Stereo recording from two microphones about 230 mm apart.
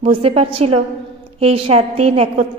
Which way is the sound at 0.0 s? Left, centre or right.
Right.